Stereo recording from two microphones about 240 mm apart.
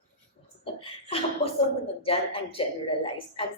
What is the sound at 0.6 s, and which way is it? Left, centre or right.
Speech, left.